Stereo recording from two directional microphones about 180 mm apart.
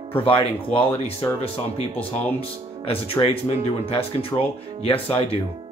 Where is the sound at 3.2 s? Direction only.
20° left (ahead or behind).